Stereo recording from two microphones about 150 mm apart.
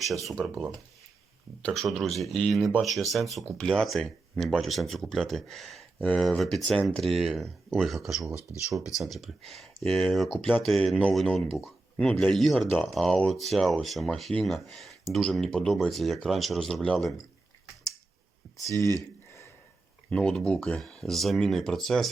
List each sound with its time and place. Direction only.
0.1 s speech: centre (ahead or behind)
18.5 s a sound: 20° left (ahead or behind)
20.1 s speech: 5° left (ahead or behind)